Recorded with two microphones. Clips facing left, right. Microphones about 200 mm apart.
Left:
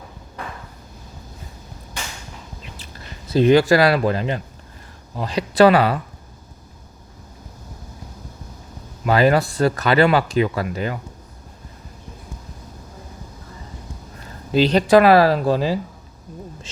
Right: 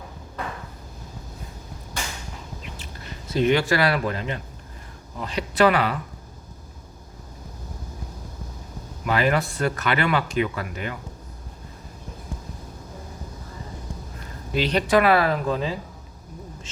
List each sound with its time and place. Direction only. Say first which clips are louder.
3.3 s speech: left 7 dB; 35° left (ahead or behind)
9.0 s speech: left 6 dB; 35° left (ahead or behind)
14.5 s speech: left 6 dB; 30° left (ahead or behind)